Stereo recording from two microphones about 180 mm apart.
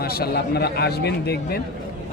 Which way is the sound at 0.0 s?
60° left (ahead or behind).